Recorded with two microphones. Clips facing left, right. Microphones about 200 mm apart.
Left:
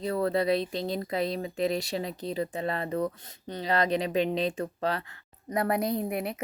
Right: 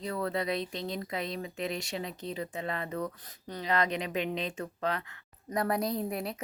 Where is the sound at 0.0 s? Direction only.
35° left (ahead or behind).